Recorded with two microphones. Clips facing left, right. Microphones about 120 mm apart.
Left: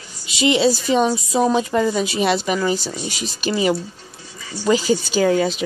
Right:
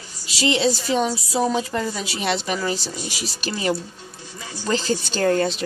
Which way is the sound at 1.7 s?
5° left (ahead or behind).